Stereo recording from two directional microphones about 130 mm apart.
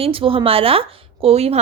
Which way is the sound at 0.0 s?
45° right (ahead or behind).